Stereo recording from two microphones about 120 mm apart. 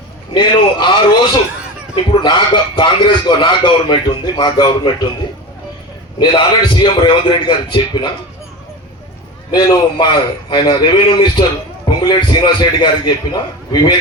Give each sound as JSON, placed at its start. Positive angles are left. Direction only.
{"t": 0.3, "sound": "a sound", "side_deg": 40}
{"t": 2.2, "sound": "a man's voice", "side_deg": 40}
{"t": 6.1, "sound": "a man's voice", "side_deg": 40}
{"t": 9.5, "sound": "a man's voice", "side_deg": 35}